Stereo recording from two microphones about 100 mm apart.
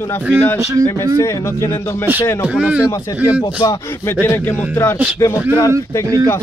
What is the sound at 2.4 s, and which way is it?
Speech, 10° right (ahead or behind).